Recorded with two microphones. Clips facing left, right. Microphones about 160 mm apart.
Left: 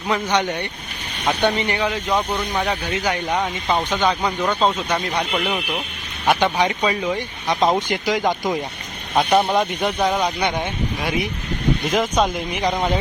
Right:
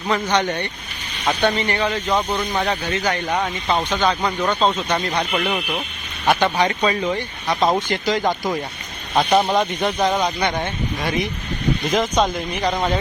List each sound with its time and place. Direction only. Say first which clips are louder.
0.1 s speech: right 1 dB; 10° left (ahead or behind)